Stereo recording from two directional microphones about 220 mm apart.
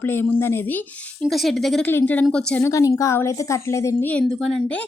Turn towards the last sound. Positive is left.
turn(degrees=5)  # may be behind; listen again after turning